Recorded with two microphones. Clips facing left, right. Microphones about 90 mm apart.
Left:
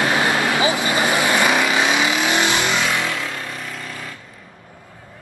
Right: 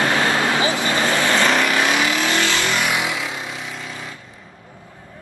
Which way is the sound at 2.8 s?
15° right (ahead or behind).